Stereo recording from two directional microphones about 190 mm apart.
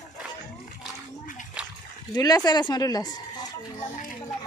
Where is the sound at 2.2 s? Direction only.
20° left (ahead or behind).